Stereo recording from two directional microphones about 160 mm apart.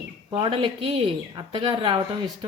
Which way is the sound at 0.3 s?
30° right (ahead or behind).